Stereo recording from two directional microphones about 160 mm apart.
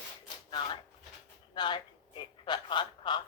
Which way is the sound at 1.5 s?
30° left (ahead or behind).